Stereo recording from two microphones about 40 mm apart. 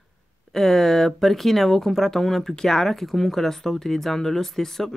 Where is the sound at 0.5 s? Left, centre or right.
Centre.